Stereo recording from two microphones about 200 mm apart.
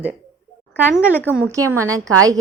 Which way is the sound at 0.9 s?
10° left (ahead or behind).